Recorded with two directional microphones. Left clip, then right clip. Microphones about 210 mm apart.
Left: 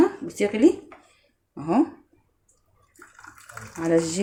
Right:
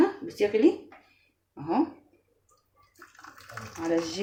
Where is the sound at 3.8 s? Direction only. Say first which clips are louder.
Left 6 dB; 50° left (ahead or behind).